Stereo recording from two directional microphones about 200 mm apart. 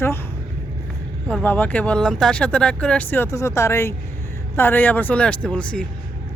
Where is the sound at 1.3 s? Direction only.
10° left (ahead or behind).